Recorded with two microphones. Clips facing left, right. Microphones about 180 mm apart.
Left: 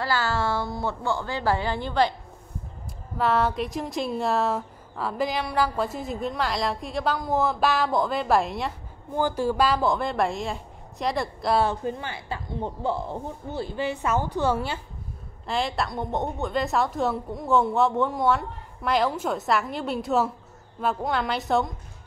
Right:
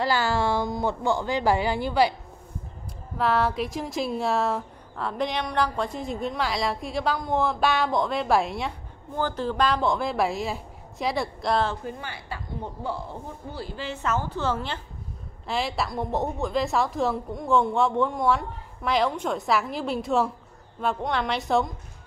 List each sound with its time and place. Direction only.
0.0 s a woman's voice: 15° right (ahead or behind)
3.2 s speech: centre (ahead or behind)
9.1 s speech: 10° left (ahead or behind)
11.8 s a woman's voice: 25° left (ahead or behind)
13.5 s a woman's voice: 20° left (ahead or behind)
15.4 s speech: centre (ahead or behind)